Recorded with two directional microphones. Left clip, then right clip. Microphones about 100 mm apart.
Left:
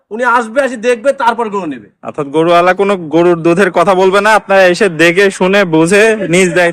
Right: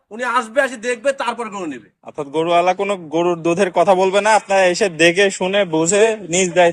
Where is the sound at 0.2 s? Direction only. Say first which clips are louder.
Left 7 dB; 20° left (ahead or behind).